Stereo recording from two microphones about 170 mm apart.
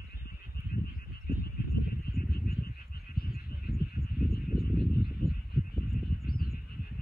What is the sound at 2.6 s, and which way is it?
Frog, 65° left (ahead or behind).